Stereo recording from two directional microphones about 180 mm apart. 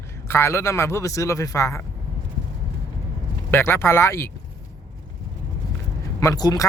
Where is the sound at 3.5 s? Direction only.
15° left (ahead or behind).